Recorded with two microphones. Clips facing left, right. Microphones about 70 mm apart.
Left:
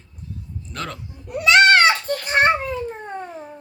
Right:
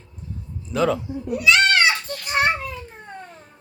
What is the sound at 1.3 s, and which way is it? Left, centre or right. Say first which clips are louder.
Children playing: left 4 dB; left.